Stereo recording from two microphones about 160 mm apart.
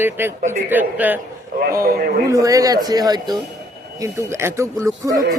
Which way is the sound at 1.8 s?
65° right (ahead or behind).